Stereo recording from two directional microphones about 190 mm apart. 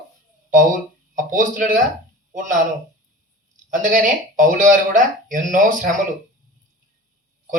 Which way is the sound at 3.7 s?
45° right (ahead or behind).